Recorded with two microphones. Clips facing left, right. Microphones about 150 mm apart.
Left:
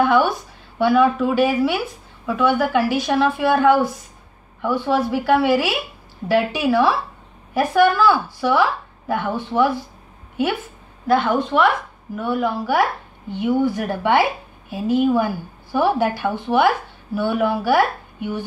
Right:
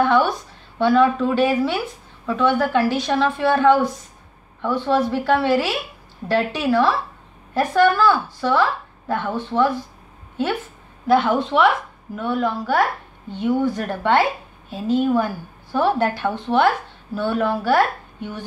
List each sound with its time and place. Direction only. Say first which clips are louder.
0.0 s a woman's voice: left 1 dB; 10° left (ahead or behind)
11.1 s a woman's voice: right 1 dB; centre (ahead or behind)